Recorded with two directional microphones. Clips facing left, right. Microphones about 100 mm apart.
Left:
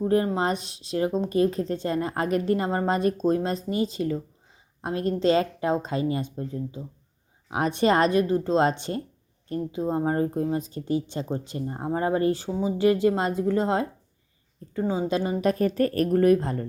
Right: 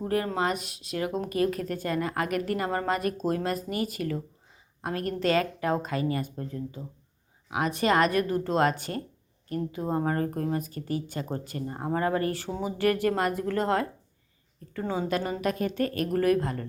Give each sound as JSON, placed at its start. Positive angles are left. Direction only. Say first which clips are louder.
{"t": 0.0, "sound": "a woman's voice", "louder": "left 4 dB", "side_deg": 25}
{"t": 7.5, "sound": "a woman's voice", "louder": "left 3 dB", "side_deg": 30}
{"t": 15.4, "sound": "a woman's voice", "louder": "left 5 dB", "side_deg": 35}